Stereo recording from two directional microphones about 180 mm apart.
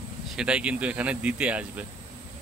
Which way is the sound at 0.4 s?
5° right (ahead or behind).